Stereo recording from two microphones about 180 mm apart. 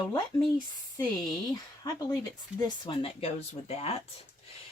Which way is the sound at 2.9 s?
30° left (ahead or behind).